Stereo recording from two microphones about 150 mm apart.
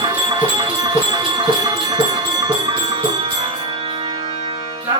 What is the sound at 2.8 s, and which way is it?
Music, 40° right (ahead or behind).